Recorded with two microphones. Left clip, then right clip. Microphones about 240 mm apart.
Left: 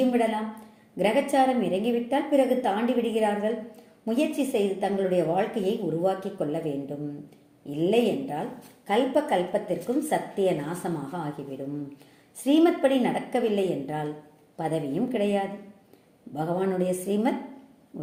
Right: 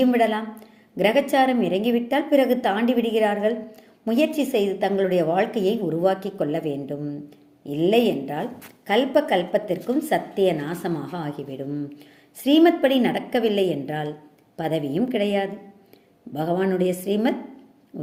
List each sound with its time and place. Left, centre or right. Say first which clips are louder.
0.1 s a woman's voice: right 5 dB; right
17.9 s hoot: right 4 dB; right